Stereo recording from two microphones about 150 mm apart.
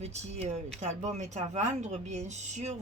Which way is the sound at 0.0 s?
45° right (ahead or behind).